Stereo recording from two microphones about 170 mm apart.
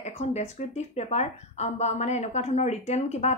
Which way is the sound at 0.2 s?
40° left (ahead or behind).